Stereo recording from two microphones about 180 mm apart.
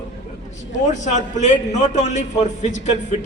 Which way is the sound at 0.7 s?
40° left (ahead or behind).